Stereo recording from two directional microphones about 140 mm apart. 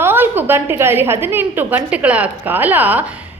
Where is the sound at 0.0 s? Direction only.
15° right (ahead or behind).